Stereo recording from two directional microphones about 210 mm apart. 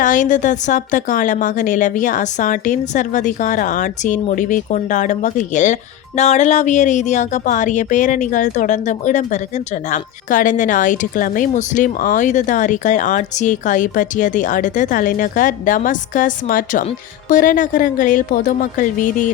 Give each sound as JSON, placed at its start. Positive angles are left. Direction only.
{"t": 0.0, "sound": "speech", "side_deg": 40}